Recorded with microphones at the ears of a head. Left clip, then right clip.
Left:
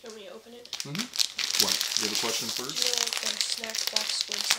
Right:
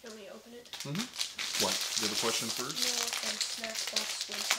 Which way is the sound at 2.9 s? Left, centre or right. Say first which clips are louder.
Left 5 dB; left.